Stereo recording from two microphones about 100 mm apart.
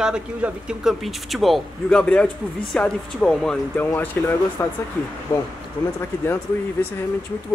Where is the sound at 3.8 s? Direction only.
20° left (ahead or behind).